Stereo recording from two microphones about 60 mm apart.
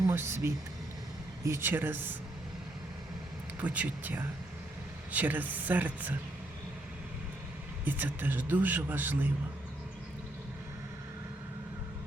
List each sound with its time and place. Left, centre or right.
0.1 s speech: right
3.6 s speech: right
7.9 s speech: right